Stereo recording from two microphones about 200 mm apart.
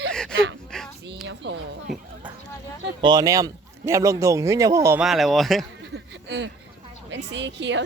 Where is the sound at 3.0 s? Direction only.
20° right (ahead or behind).